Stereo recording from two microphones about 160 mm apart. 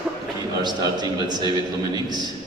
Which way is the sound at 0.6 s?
25° right (ahead or behind).